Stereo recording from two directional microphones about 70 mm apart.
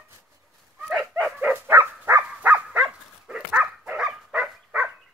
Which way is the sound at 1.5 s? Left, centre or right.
Right.